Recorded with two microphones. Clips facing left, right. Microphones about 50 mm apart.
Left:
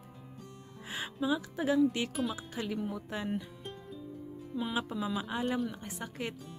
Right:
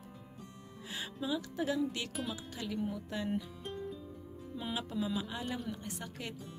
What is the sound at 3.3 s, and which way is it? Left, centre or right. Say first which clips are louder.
Music: even; centre.